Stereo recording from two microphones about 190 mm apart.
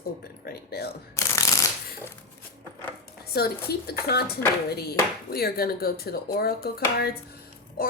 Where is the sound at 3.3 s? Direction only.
55° left (ahead or behind).